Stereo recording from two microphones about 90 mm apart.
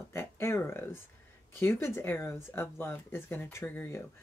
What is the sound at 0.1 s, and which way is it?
Speech, 30° left (ahead or behind).